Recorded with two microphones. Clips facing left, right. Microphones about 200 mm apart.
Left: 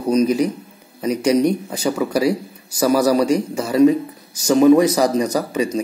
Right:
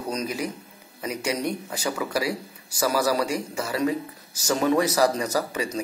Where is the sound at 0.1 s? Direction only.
20° left (ahead or behind).